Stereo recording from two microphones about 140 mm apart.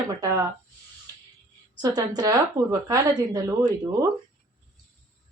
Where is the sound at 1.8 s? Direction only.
30° right (ahead or behind).